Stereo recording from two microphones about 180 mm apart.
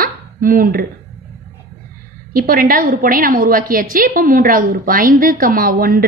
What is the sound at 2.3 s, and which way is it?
A woman's voice, 55° right (ahead or behind).